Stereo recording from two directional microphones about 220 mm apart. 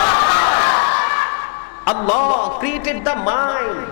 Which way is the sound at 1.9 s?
30° left (ahead or behind).